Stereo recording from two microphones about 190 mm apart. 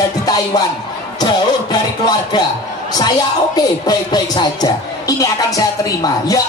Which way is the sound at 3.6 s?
20° left (ahead or behind).